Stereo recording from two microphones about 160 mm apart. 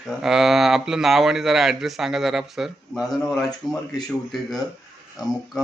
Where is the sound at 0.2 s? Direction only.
Centre (ahead or behind).